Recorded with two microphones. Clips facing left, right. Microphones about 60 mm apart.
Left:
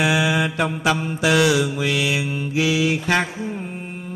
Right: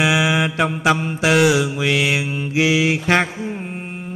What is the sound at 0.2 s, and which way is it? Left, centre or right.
Mantra, right.